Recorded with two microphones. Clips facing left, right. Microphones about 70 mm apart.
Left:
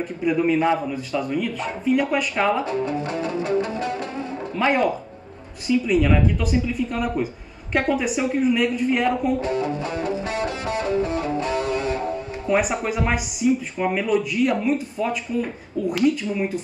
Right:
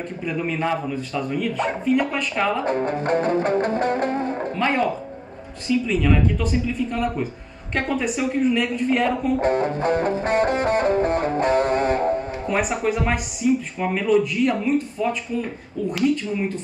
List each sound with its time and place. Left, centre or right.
0.2 s speech: centre
2.6 s music: right
4.6 s speech: centre
9.4 s music: right
12.4 s speech: centre